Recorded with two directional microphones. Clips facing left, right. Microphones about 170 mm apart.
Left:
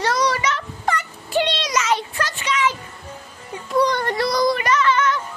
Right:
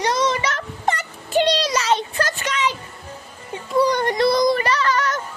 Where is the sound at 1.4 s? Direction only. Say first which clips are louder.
Right 4 dB; 35° right (ahead or behind).